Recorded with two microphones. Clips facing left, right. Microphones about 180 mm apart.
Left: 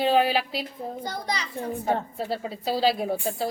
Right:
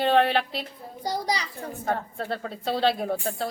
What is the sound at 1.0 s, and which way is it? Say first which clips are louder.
Speech: right 6 dB; 35° right (ahead or behind).